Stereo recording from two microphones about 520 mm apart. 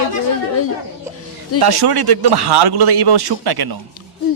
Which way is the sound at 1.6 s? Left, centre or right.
Right.